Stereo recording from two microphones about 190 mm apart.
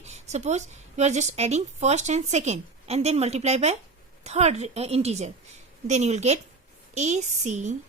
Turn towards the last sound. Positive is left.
turn(degrees=-40)  # may be behind; listen again after turning